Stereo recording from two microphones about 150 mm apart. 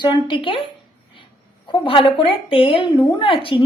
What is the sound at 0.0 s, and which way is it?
A woman's voice, 35° left (ahead or behind).